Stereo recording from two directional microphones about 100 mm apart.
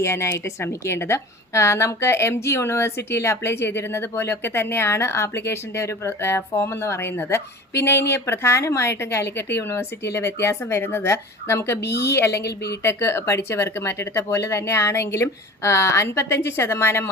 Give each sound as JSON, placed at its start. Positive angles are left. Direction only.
{"t": 0.0, "sound": "a woman's voice", "side_deg": 30}